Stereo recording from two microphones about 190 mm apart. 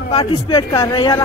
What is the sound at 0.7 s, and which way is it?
Speech, 20° left (ahead or behind).